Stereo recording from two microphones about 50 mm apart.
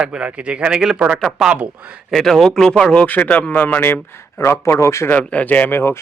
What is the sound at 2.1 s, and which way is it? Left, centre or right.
Speech, centre.